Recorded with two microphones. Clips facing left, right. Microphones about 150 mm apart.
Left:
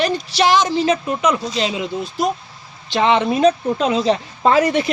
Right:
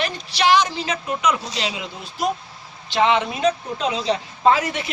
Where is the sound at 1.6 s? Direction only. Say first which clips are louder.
Left 7 dB; 40° left (ahead or behind).